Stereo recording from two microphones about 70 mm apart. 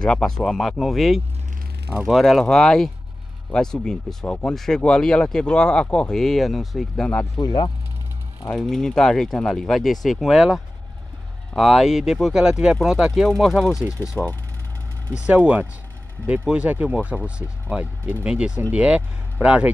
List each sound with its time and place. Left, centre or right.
0.0 s speech: centre
2.4 s speech: centre
4.3 s speech: centre
6.1 s speech: centre
8.5 s speech: centre
14.2 s speech: centre
15.1 s speech: centre